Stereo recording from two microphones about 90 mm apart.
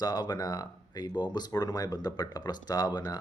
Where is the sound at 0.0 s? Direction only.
50° left (ahead or behind).